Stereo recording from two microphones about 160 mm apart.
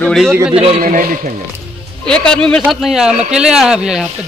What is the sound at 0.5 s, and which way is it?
Speech, 35° right (ahead or behind).